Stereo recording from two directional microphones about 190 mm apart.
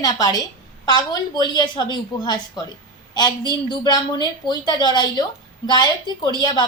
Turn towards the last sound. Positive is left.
turn(degrees=20)  # may be behind; listen again after turning